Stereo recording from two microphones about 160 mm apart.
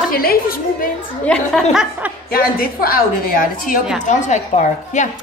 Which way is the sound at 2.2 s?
70° left (ahead or behind).